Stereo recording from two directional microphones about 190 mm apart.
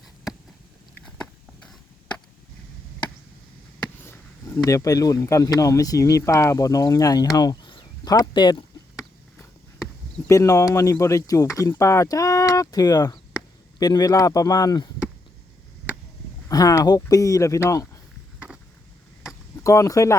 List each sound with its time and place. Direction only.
1.0 s a sound: 5° left (ahead or behind)
4.0 s speech: 15° left (ahead or behind)
16.5 s speech: 20° left (ahead or behind)
18.3 s vehicle: 5° right (ahead or behind)
19.6 s speech: 15° left (ahead or behind)